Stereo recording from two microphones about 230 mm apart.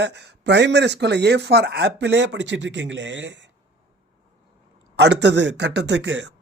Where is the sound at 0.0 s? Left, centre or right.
Right.